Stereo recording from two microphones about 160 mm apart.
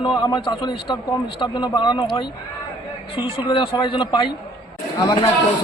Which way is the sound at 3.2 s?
35° left (ahead or behind).